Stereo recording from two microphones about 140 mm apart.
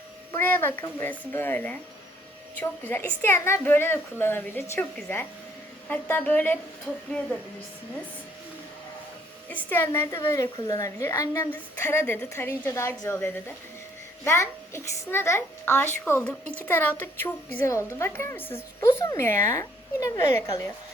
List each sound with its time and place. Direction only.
0.3 s a woman's voice: 15° left (ahead or behind)
9.5 s a woman's voice: 10° left (ahead or behind)